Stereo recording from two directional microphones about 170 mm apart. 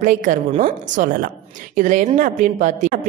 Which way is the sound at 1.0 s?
55° right (ahead or behind).